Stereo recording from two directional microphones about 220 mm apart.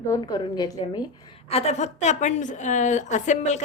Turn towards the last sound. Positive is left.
turn(degrees=35)  # may be behind; listen again after turning